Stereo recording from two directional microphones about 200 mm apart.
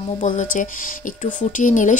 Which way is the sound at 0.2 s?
40° left (ahead or behind).